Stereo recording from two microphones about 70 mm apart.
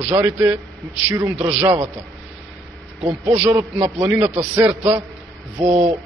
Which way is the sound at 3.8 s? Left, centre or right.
Right.